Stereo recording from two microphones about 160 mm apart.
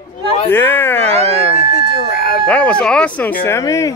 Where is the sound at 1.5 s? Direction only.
85° left.